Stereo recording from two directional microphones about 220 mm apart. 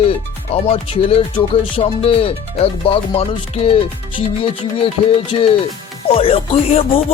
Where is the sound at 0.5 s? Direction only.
25° left (ahead or behind).